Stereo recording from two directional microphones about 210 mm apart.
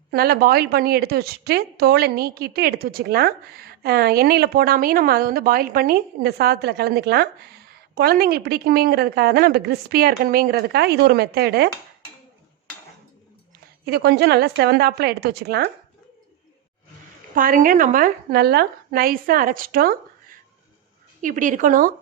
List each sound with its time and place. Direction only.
0.1 s a woman's voice: 45° right (ahead or behind)
13.8 s a woman's voice: 50° right (ahead or behind)
17.3 s a woman's voice: 40° right (ahead or behind)
21.2 s speech: 40° right (ahead or behind)